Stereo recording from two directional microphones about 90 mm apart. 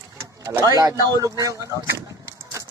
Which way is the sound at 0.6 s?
45° right (ahead or behind).